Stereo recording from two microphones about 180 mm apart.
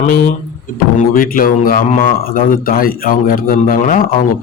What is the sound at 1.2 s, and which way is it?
A man's voice, 50° left (ahead or behind).